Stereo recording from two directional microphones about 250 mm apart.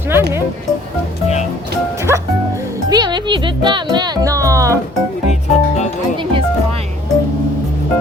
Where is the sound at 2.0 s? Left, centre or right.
Centre.